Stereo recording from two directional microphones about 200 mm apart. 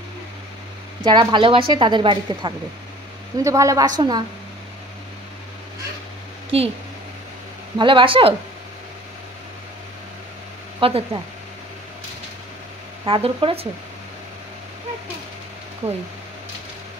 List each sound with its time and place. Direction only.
1.0 s a woman's voice: 20° right (ahead or behind)
6.5 s a woman's voice: 30° right (ahead or behind)
7.7 s a woman's voice: 25° right (ahead or behind)
10.8 s speech: 30° right (ahead or behind)
13.0 s a woman's voice: 25° right (ahead or behind)